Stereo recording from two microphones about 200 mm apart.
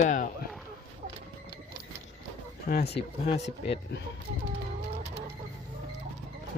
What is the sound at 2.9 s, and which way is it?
Speech, 30° left (ahead or behind).